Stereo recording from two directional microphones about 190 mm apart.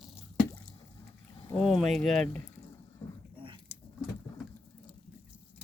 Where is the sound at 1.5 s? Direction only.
Centre (ahead or behind).